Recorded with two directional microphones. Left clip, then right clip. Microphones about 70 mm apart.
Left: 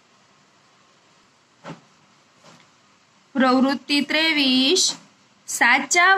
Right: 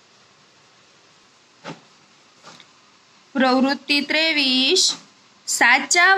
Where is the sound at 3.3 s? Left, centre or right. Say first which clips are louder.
Right 1 dB; centre.